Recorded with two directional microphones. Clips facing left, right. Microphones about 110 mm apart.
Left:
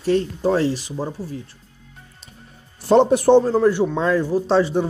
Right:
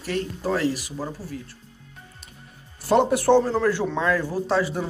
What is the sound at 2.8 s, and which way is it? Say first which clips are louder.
Speech: left 4 dB; 25° left (ahead or behind).